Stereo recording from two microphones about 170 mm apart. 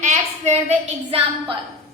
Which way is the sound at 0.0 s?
40° right (ahead or behind).